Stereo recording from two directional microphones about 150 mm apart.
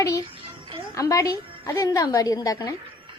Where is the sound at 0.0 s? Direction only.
25° left (ahead or behind).